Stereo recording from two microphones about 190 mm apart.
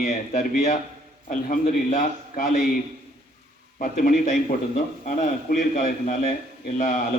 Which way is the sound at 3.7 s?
45° left (ahead or behind).